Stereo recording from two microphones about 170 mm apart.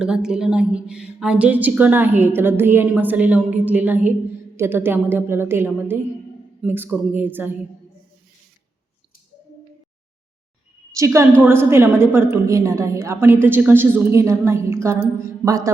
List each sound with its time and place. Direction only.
0.0 s a woman's voice: 5° right (ahead or behind)
10.9 s a woman's voice: 15° right (ahead or behind)